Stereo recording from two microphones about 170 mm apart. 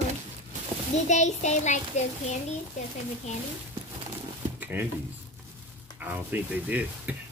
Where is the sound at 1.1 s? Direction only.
45° left (ahead or behind).